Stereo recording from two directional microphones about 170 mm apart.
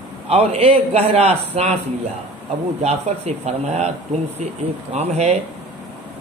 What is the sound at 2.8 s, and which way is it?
Speech, 40° right (ahead or behind).